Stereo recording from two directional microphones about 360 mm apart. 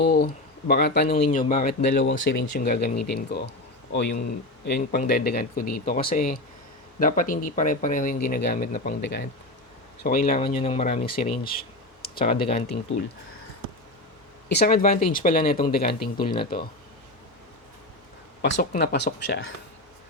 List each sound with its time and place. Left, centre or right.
0.0 s speech: left
2.9 s speech: left
3.2 s speech: left
14.5 s speech: left
16.1 s speech: centre
18.4 s speech: left